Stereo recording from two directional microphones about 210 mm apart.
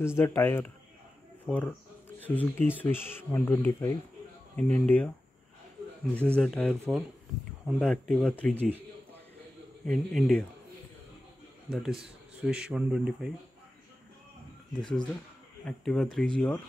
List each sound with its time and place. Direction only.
0.0 s speech: 10° left (ahead or behind)
6.1 s speech: 5° left (ahead or behind)
9.8 s speech: centre (ahead or behind)
11.7 s speech: centre (ahead or behind)
15.6 s speech: 5° left (ahead or behind)